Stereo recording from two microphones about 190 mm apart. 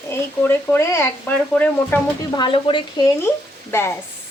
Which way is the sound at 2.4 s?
25° left (ahead or behind).